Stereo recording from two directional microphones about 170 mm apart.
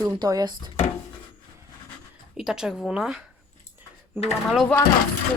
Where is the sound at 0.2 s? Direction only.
25° right (ahead or behind).